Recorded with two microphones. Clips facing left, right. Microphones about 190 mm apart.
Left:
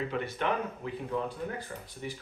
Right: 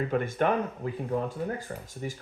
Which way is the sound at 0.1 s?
50° right (ahead or behind).